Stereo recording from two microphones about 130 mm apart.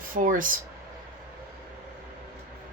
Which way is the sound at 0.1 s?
90° right.